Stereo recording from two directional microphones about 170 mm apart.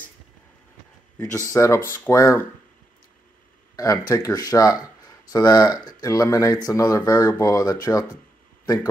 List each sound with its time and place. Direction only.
1.1 s speech: 15° left (ahead or behind)
3.7 s speech: 20° left (ahead or behind)